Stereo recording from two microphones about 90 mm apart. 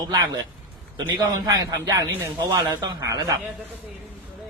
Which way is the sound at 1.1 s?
50° right (ahead or behind).